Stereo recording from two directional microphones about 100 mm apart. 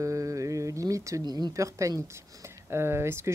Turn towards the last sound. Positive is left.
turn(degrees=-25)  # may be behind; listen again after turning